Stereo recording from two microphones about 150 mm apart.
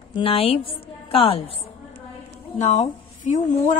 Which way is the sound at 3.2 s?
55° left (ahead or behind).